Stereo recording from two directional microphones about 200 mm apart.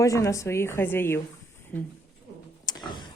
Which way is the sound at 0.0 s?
15° left (ahead or behind).